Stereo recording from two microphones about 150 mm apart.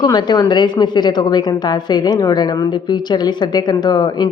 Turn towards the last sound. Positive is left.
turn(degrees=25)  # may be behind; listen again after turning